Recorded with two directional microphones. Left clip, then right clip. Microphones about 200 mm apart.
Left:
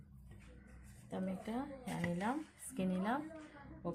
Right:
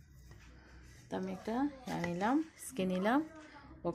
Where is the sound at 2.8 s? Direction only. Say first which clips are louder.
Right 6 dB; 45° right (ahead or behind).